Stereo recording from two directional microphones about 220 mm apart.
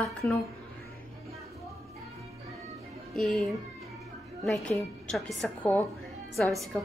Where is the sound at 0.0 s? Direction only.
Centre (ahead or behind).